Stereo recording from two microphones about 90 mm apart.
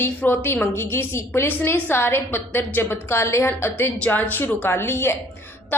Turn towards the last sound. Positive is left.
turn(degrees=25)  # may be behind; listen again after turning